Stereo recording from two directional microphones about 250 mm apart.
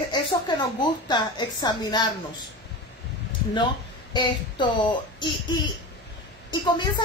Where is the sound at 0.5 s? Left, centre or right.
Centre.